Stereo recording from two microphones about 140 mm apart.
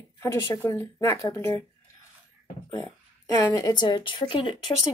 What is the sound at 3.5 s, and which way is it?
Speech, 30° left (ahead or behind).